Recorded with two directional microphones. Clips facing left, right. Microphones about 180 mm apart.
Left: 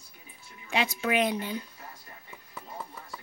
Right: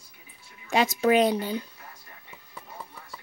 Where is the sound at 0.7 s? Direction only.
40° right (ahead or behind).